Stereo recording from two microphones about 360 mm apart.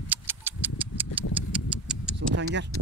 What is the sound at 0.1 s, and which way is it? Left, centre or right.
Livestock, centre.